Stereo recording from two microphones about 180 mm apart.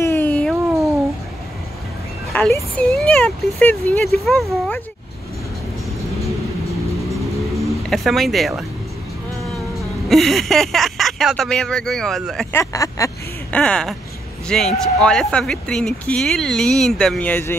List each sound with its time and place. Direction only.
0.0 s cat: 10° left (ahead or behind)
2.3 s speech: 10° left (ahead or behind)
7.9 s speech: centre (ahead or behind)
10.0 s speech: centre (ahead or behind)
12.5 s speech: 20° left (ahead or behind)
13.5 s speech: 5° left (ahead or behind)